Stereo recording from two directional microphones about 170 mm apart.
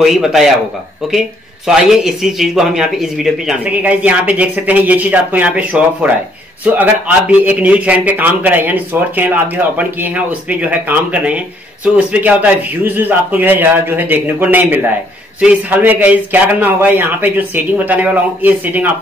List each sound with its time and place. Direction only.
0.0 s speech: centre (ahead or behind)
1.7 s a man's voice: 5° right (ahead or behind)